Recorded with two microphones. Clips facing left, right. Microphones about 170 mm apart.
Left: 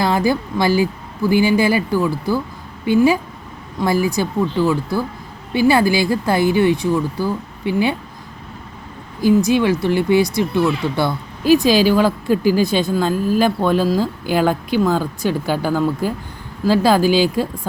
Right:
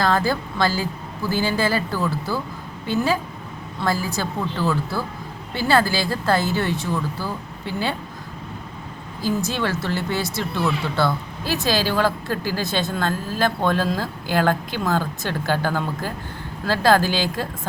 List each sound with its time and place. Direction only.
0.0 s a woman's voice: 15° left (ahead or behind)
9.5 s speech: 15° left (ahead or behind)